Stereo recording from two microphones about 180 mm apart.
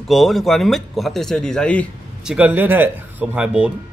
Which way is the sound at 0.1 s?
Centre (ahead or behind).